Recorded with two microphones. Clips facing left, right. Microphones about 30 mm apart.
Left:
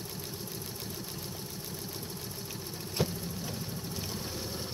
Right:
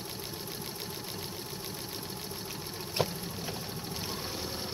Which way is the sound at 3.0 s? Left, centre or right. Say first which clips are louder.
Right 1 dB; right.